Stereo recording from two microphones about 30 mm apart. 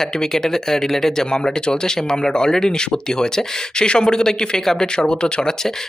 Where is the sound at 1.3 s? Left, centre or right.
Left.